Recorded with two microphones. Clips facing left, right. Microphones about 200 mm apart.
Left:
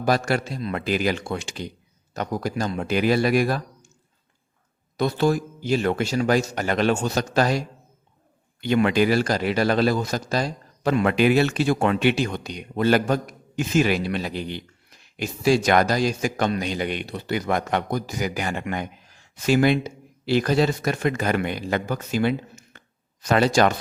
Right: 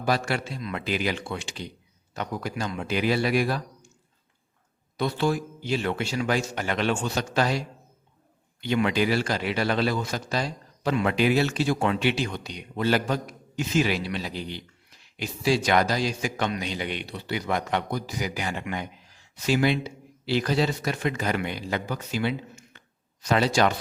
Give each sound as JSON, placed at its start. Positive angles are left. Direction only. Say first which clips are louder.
{"t": 0.0, "sound": "speech", "louder": "left 4 dB", "side_deg": 45}
{"t": 4.9, "sound": "speech", "louder": "left 4 dB", "side_deg": 45}
{"t": 8.6, "sound": "speech", "louder": "left 4 dB", "side_deg": 50}